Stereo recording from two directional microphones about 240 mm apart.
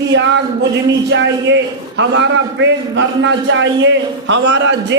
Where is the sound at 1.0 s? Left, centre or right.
Right.